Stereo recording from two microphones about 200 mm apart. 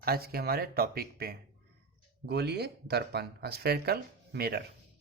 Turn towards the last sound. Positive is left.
turn(degrees=-50)  # may be behind; listen again after turning